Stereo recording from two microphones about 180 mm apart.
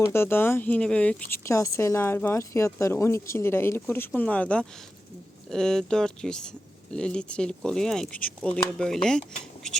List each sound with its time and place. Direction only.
0.0 s speech: 15° left (ahead or behind)